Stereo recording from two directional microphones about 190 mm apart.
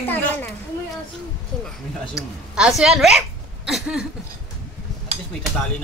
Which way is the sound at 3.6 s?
5° right (ahead or behind).